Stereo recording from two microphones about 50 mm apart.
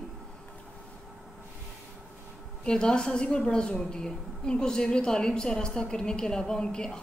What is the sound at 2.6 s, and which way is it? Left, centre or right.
A woman's voice, centre.